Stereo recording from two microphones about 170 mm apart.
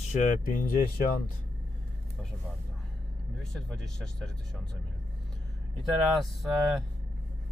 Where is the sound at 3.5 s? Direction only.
5° left (ahead or behind).